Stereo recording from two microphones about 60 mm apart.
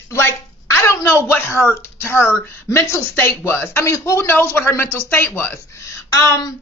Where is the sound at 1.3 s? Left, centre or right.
Left.